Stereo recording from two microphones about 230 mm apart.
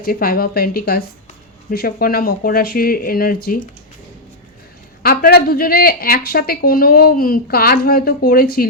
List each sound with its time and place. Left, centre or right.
0.0 s speech: left
5.0 s speech: left